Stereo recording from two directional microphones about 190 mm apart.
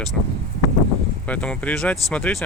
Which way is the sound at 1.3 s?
5° left (ahead or behind).